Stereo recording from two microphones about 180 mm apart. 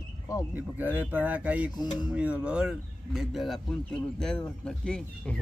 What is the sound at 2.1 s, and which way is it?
Speech, 5° right (ahead or behind).